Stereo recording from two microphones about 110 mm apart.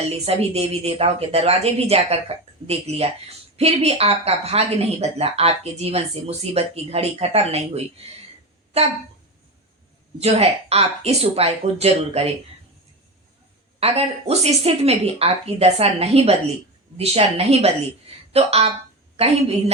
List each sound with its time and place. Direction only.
0.0 s speech: 70° right (ahead or behind)
10.2 s speech: 70° right (ahead or behind)
13.7 s speech: 65° right (ahead or behind)